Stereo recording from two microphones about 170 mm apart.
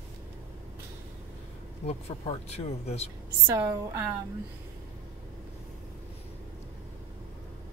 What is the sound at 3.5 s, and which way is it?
Speech, 20° right (ahead or behind).